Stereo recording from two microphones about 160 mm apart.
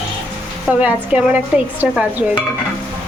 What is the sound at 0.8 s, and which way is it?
A woman's voice, 10° right (ahead or behind).